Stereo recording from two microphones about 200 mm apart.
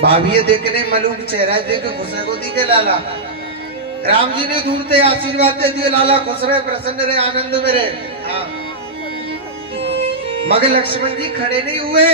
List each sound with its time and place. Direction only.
0.1 s a man's voice: 30° right (ahead or behind)
4.1 s a man's voice: 25° right (ahead or behind)
10.5 s a man's voice: 30° right (ahead or behind)